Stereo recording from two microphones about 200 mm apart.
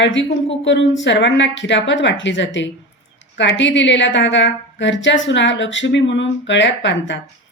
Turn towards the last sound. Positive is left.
turn(degrees=65)  # may be behind; listen again after turning